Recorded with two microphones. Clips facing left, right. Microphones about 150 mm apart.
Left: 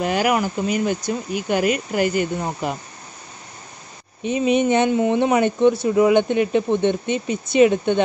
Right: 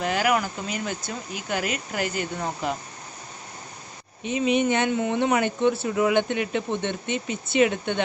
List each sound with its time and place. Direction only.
0.0 s speech: 20° left (ahead or behind)
4.2 s speech: 20° right (ahead or behind)
4.6 s speech: 20° left (ahead or behind)